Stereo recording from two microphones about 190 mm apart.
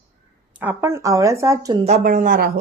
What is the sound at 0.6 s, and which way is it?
Speech, 10° right (ahead or behind).